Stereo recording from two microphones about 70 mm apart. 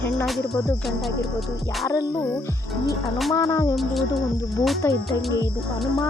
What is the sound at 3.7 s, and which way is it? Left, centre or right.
Speech, centre.